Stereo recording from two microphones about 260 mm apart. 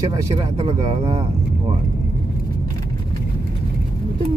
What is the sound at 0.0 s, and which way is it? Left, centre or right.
Speech, centre.